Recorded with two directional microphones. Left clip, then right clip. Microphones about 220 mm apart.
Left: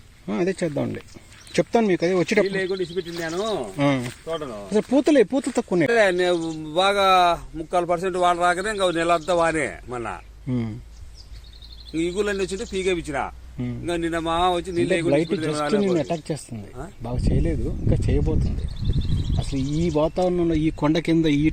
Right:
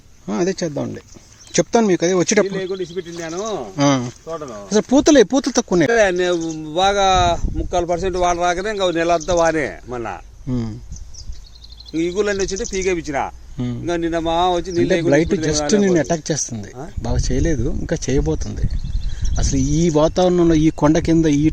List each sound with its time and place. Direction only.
0.3 s a man's voice: 10° right (ahead or behind)
1.5 s speech: 20° right (ahead or behind)
2.5 s a man's voice: centre (ahead or behind)
3.8 s speech: 20° right (ahead or behind)
4.3 s a man's voice: centre (ahead or behind)
4.7 s speech: 20° right (ahead or behind)
5.9 s speech: 50° right (ahead or behind)
10.5 s speech: 10° right (ahead or behind)
11.9 s speech: 40° right (ahead or behind)
15.1 s speech: 30° right (ahead or behind)
19.4 s speech: 30° right (ahead or behind)
20.8 s speech: 15° right (ahead or behind)